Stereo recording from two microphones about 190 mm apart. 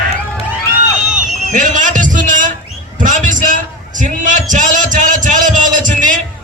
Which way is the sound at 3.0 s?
45° right (ahead or behind).